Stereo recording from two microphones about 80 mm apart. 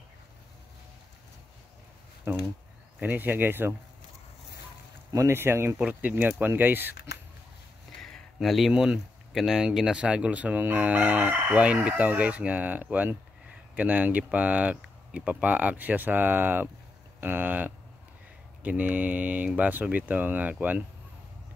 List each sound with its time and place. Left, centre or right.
2.3 s speech: right
5.1 s speech: right
5.8 s speech: centre
8.0 s speech: centre; by 20.5 s right